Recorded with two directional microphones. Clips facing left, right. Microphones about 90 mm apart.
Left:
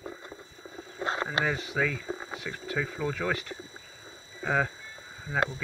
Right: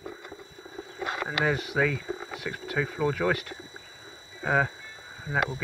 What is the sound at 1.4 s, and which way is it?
Speech, 15° right (ahead or behind).